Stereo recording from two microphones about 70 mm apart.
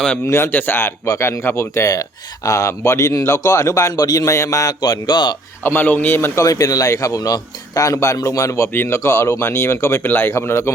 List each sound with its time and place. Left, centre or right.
0.3 s speech: left
1.0 s speech: left
3.9 s a man's voice: left
4.3 s speech: left
4.8 s speech: left
5.6 s speech: left
6.4 s speech: left